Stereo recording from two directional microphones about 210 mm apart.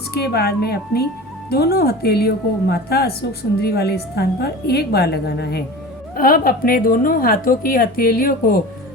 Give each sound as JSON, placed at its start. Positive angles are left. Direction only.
{"t": 0.1, "sound": "speech", "side_deg": 50}